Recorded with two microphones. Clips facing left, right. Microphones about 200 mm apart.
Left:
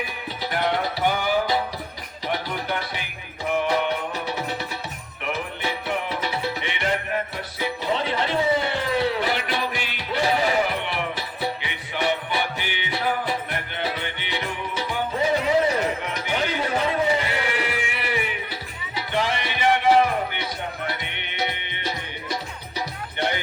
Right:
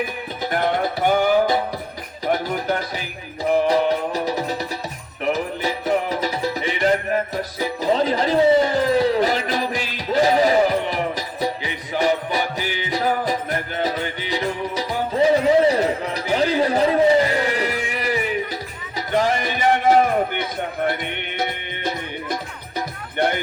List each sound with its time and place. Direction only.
0.5 s music: 50° right (ahead or behind)